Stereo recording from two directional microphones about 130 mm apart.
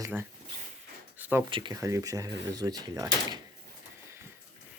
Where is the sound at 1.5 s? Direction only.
40° right (ahead or behind).